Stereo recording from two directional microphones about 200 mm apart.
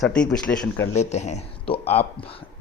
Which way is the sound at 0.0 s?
5° left (ahead or behind).